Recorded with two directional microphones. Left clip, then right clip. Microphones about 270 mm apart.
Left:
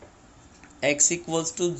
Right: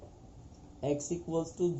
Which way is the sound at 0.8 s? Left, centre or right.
Left.